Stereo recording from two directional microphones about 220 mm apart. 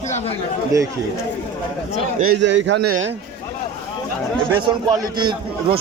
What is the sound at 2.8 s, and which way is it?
Speech, 85° right.